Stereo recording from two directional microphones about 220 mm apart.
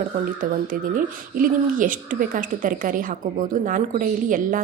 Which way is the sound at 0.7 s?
40° right (ahead or behind).